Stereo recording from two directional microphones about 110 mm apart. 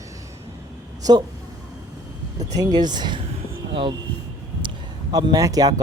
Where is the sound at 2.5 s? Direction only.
35° right (ahead or behind).